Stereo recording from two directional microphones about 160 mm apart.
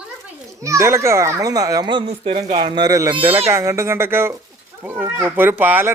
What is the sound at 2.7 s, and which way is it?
A child's voice, 25° right (ahead or behind).